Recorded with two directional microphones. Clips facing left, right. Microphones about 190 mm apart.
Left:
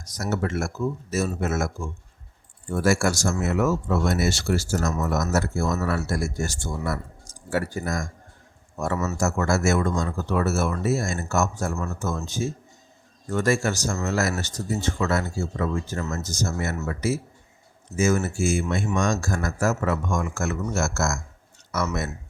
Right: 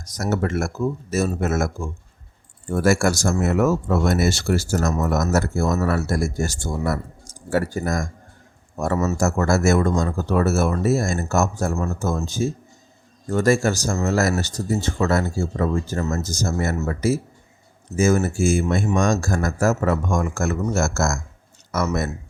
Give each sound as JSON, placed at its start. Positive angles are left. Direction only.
{"t": 0.2, "sound": "speech", "side_deg": -45}